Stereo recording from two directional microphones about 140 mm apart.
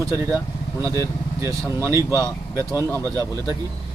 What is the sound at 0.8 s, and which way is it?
Speech, 20° right (ahead or behind).